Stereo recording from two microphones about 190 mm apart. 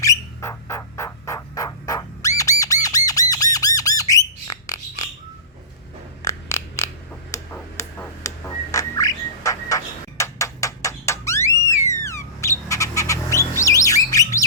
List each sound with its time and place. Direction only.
0.0 s bird: 15° left (ahead or behind)
2.8 s squawk: 20° left (ahead or behind)
4.1 s bird: 20° left (ahead or behind)
6.2 s a sound: 15° left (ahead or behind)
11.9 s bird: 15° left (ahead or behind)